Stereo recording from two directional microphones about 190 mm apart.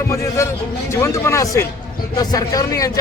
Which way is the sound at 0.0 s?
15° left (ahead or behind).